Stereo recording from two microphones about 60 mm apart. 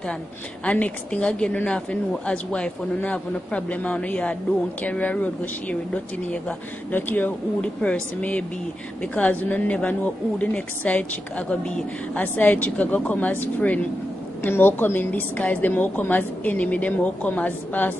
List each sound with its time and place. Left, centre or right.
0.7 s a woman's voice: left
6.9 s speech: left
7.6 s a woman's voice: left